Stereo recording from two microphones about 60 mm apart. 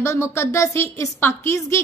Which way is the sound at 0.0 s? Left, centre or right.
Left.